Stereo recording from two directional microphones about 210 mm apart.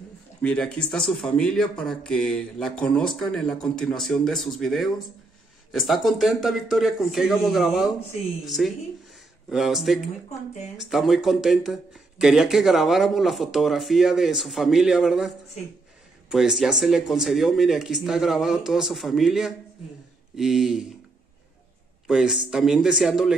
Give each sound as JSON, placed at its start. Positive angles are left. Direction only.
{"t": 0.4, "sound": "speech", "side_deg": 5}
{"t": 22.0, "sound": "speech", "side_deg": -5}